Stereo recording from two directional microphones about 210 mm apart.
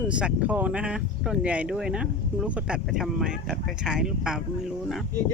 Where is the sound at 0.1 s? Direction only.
5° right (ahead or behind).